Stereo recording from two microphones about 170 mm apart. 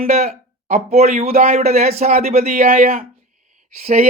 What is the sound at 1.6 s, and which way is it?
Speech, 40° right (ahead or behind).